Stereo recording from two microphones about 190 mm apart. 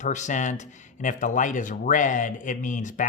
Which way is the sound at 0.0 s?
40° left (ahead or behind).